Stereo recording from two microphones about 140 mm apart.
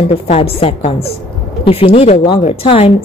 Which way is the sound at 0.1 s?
45° left (ahead or behind).